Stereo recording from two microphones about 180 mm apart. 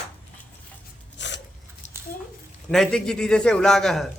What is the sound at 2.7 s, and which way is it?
A man's voice, centre (ahead or behind).